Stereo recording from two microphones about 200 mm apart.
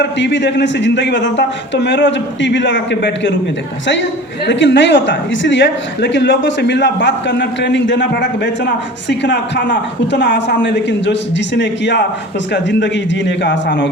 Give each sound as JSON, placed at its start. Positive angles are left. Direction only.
{"t": 0.0, "sound": "speech", "side_deg": 60}
{"t": 4.4, "sound": "speech", "side_deg": 65}